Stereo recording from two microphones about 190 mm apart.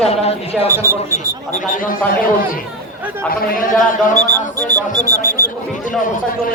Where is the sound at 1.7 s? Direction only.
45° left (ahead or behind).